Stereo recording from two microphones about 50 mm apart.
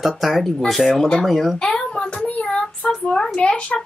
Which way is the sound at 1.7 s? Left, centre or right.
Centre.